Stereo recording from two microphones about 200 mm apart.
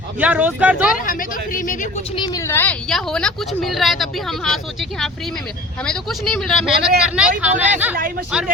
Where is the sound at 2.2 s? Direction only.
15° left (ahead or behind); by 4.0 s centre (ahead or behind).